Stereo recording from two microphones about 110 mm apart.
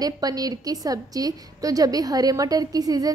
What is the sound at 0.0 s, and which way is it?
A woman's voice, 35° right (ahead or behind).